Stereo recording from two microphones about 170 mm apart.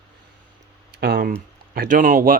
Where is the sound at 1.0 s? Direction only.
65° right (ahead or behind).